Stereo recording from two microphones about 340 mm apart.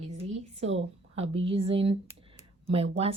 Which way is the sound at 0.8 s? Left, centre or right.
Centre.